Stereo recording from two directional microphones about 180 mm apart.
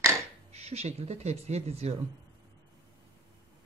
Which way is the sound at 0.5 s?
35° right (ahead or behind).